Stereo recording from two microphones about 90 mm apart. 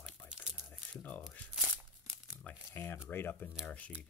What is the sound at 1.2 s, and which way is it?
Speech, 10° right (ahead or behind).